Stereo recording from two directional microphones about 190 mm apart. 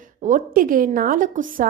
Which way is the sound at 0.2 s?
40° right (ahead or behind).